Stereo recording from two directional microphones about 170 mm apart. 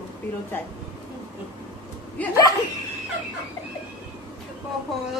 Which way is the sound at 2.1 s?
20° left (ahead or behind).